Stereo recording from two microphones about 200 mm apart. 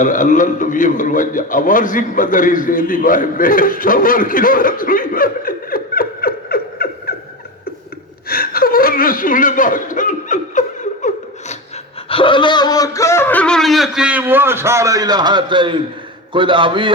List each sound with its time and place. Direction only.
0.0 s a man's voice: 40° left (ahead or behind)
7.1 s a sound: 50° left (ahead or behind)
8.3 s whimper: 50° left (ahead or behind)
12.0 s a man's voice: 25° left (ahead or behind); by 16.9 s 25° right (ahead or behind)